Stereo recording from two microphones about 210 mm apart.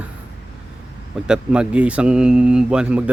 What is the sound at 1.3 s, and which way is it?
Speech, 5° right (ahead or behind).